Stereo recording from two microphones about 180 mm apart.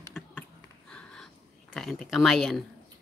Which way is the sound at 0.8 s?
5° left (ahead or behind).